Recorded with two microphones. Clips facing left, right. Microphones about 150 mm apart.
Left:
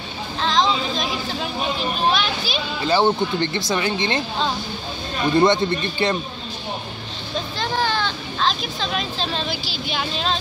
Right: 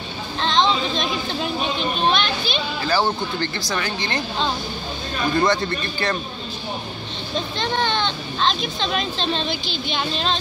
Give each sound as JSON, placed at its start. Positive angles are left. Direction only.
{"t": 0.4, "sound": "a sound", "side_deg": 0}
{"t": 2.8, "sound": "speech", "side_deg": 25}
{"t": 5.3, "sound": "speech", "side_deg": 25}
{"t": 7.5, "sound": "speech", "side_deg": 5}